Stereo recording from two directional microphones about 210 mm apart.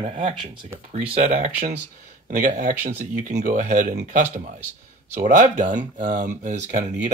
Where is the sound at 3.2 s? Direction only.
35° right (ahead or behind).